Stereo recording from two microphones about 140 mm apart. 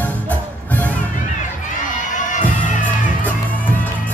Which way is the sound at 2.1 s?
65° left (ahead or behind).